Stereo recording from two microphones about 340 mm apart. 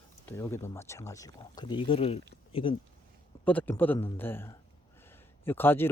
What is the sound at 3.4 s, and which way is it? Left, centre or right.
A man's voice, centre.